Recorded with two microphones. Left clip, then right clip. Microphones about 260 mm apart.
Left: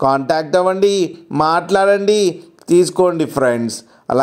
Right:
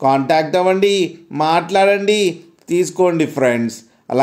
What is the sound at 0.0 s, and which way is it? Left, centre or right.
Speech, left.